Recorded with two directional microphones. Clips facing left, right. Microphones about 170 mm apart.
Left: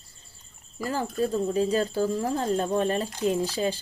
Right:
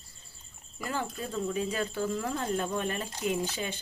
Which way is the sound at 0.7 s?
35° left (ahead or behind).